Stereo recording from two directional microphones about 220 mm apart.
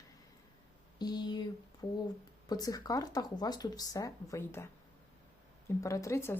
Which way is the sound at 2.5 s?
15° left (ahead or behind).